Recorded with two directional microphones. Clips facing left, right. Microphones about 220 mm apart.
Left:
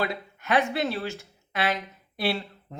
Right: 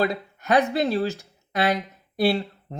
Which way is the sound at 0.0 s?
40° right (ahead or behind).